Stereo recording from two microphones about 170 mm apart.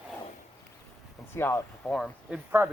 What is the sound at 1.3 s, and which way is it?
Speech, 15° left (ahead or behind).